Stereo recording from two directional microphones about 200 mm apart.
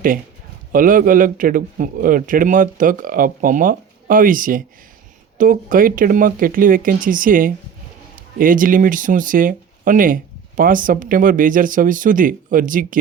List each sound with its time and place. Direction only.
0.7 s speech: 45° right (ahead or behind)